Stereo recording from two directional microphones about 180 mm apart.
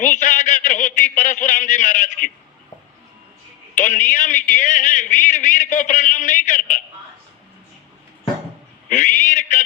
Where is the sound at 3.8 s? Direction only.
45° left (ahead or behind).